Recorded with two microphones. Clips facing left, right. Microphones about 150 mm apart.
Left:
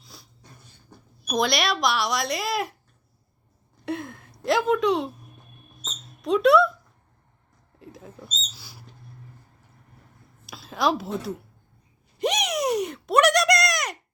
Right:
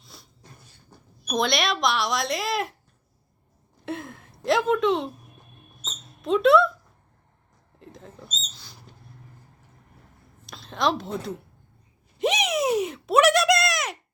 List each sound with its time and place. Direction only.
0.0 s dog: centre (ahead or behind)
1.3 s speech: centre (ahead or behind)
3.8 s a woman's voice: centre (ahead or behind)
6.2 s speech: centre (ahead or behind)
7.8 s mouse: 5° left (ahead or behind)
10.4 s a woman's voice: 5° left (ahead or behind)
12.2 s a sound: centre (ahead or behind)